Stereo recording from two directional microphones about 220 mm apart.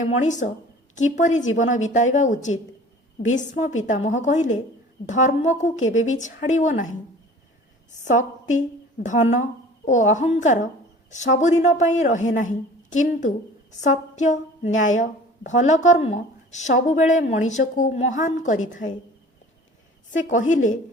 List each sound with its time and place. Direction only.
0.0 s speech: 35° left (ahead or behind)
8.0 s a woman's voice: 35° left (ahead or behind)
20.2 s speech: 35° left (ahead or behind)